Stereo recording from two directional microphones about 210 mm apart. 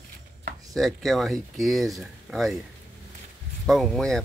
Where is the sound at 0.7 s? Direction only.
Centre (ahead or behind).